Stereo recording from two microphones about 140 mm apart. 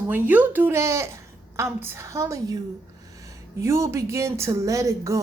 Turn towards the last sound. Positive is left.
turn(degrees=-20)  # may be behind; listen again after turning